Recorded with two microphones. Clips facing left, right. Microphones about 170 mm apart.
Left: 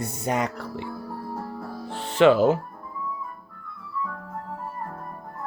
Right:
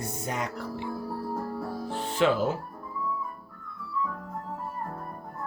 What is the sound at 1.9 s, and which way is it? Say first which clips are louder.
Music: left 7 dB; 75° left (ahead or behind).